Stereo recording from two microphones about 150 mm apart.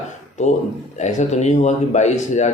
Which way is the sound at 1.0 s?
50° left (ahead or behind).